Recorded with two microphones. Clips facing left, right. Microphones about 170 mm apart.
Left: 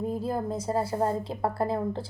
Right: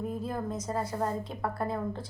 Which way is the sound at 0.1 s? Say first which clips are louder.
Left 4 dB; 30° left (ahead or behind).